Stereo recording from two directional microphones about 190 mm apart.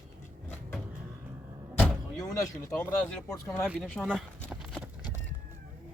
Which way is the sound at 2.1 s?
15° left (ahead or behind).